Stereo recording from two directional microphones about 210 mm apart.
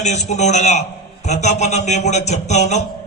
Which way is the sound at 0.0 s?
35° left (ahead or behind).